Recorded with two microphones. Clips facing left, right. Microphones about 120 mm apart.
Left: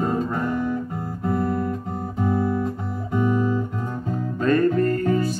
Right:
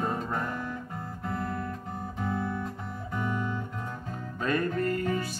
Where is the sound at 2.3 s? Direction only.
40° left (ahead or behind).